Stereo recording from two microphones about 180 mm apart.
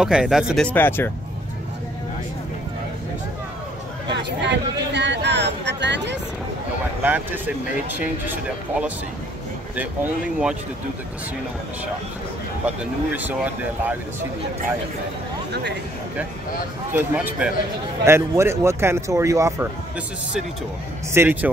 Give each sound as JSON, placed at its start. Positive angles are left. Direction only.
{"t": 0.0, "sound": "speech", "side_deg": -5}
{"t": 0.7, "sound": "speech", "side_deg": 10}
{"t": 4.1, "sound": "a sound", "side_deg": -70}
{"t": 7.0, "sound": "speech", "side_deg": -10}
{"t": 12.6, "sound": "speech", "side_deg": -10}
{"t": 16.9, "sound": "speech", "side_deg": -10}
{"t": 21.1, "sound": "speech", "side_deg": -10}